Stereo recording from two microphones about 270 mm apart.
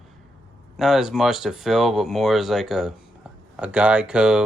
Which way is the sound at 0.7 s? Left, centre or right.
Centre.